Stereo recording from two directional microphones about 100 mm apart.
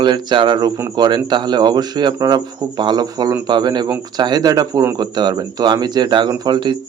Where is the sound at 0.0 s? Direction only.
50° right (ahead or behind).